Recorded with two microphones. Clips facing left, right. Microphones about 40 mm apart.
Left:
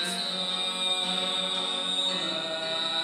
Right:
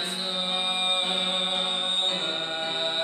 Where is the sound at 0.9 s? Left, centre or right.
Right.